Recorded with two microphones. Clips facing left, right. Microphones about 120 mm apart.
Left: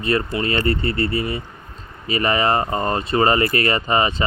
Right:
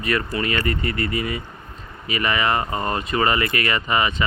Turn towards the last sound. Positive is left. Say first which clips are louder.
# left 3 dB
turn(degrees=35)  # may be behind; listen again after turning